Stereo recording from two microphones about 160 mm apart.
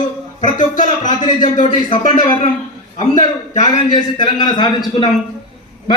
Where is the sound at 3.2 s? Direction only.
25° left (ahead or behind).